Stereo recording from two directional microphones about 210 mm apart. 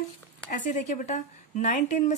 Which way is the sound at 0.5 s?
35° left (ahead or behind).